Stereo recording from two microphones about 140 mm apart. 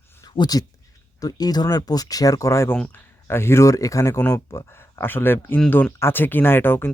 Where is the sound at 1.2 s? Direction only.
25° left (ahead or behind).